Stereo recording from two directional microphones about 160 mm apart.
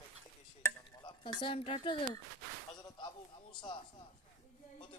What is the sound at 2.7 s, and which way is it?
Speech, 30° left (ahead or behind).